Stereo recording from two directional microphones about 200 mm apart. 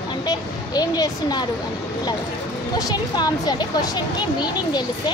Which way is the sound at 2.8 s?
20° left (ahead or behind).